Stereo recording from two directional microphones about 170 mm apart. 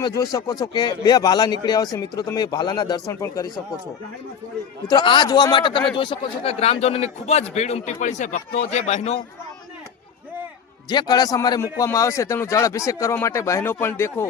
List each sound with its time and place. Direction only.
0.0 s speech: 25° left (ahead or behind)
4.9 s a man's voice: 25° left (ahead or behind)
10.8 s a man's voice: 25° left (ahead or behind)